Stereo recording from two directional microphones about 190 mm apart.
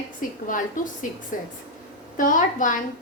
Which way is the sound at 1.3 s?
45° left (ahead or behind).